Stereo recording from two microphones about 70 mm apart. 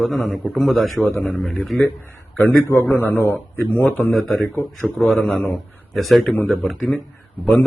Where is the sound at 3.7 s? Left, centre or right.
Left.